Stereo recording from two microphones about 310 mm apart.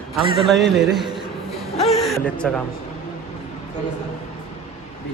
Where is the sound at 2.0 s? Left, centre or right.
Centre.